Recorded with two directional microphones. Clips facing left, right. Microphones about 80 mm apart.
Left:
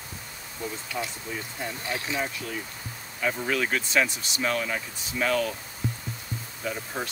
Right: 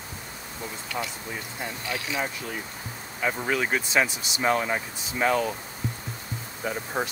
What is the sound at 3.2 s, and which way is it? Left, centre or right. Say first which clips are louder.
Speech: right 1 dB; centre.